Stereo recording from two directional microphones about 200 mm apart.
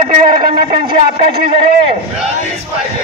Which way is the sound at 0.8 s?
25° right (ahead or behind).